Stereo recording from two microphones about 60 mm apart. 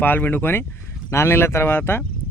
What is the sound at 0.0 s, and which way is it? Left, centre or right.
Speech, left.